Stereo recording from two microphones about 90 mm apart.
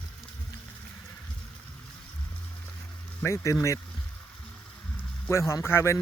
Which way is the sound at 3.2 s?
35° left (ahead or behind).